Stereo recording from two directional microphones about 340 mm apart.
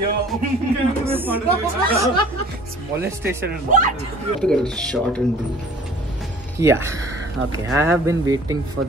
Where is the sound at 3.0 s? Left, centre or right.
Centre.